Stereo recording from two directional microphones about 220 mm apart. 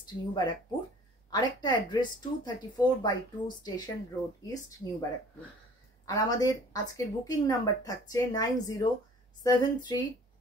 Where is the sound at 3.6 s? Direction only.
20° left (ahead or behind).